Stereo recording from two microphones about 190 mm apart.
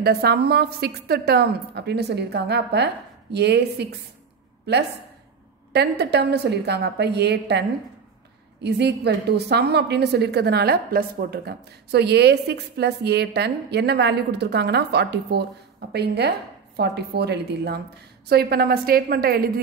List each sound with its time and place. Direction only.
0.0 s a woman's voice: 60° right (ahead or behind)
5.7 s a woman's voice: 60° right (ahead or behind)
8.6 s a woman's voice: 60° right (ahead or behind)